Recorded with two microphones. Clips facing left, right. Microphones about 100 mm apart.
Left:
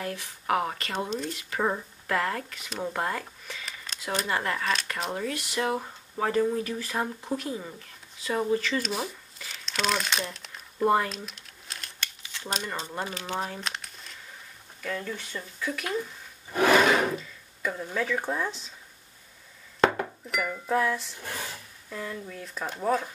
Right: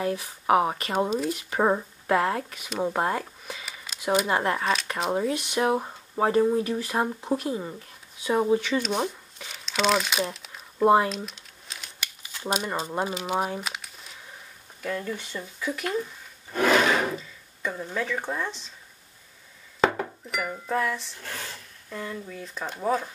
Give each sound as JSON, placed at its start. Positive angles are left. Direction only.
{"t": 0.0, "sound": "speech", "side_deg": -20}
{"t": 2.8, "sound": "a sound", "side_deg": -25}
{"t": 4.0, "sound": "speech", "side_deg": -10}
{"t": 4.3, "sound": "speech", "side_deg": -25}
{"t": 8.7, "sound": "speech", "side_deg": 0}
{"t": 10.8, "sound": "speech", "side_deg": -20}
{"t": 11.2, "sound": "a sound", "side_deg": 0}
{"t": 12.9, "sound": "speech", "side_deg": -15}
{"t": 16.5, "sound": "a sound", "side_deg": 5}
{"t": 19.8, "sound": "glass", "side_deg": 0}
{"t": 20.6, "sound": "speech", "side_deg": 5}
{"t": 21.8, "sound": "speech", "side_deg": 0}